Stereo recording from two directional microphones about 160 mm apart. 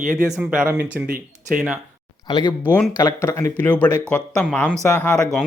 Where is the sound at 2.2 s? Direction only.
25° left (ahead or behind).